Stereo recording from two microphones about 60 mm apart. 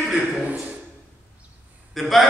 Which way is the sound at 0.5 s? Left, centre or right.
Right.